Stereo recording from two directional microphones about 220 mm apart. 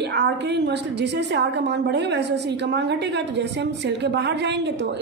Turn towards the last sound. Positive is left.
turn(degrees=-50)  # may be behind; listen again after turning